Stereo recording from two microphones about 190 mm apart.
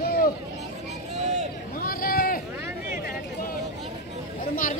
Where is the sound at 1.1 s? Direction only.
35° right (ahead or behind).